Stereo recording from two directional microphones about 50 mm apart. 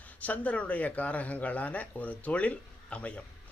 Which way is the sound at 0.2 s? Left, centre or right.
Left.